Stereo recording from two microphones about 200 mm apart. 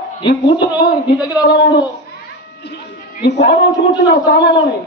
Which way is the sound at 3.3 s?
60° left (ahead or behind).